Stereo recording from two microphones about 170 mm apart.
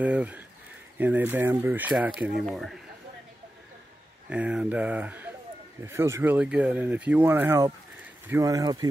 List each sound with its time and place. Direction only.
0.0 s speech: 10° right (ahead or behind)
4.3 s speech: 5° right (ahead or behind); by 8.8 s 20° right (ahead or behind)